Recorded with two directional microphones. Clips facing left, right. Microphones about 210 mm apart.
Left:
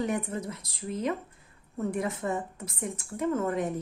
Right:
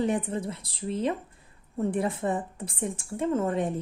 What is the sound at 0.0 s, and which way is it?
A woman's voice, 30° right (ahead or behind).